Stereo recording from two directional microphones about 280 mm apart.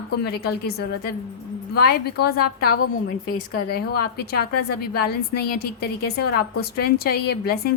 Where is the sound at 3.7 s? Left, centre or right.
Left.